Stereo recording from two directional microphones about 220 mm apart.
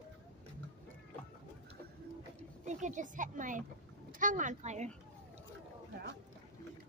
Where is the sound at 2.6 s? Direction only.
35° right (ahead or behind).